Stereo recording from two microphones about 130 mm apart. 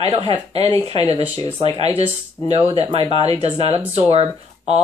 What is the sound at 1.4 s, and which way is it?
Speech, 30° left (ahead or behind).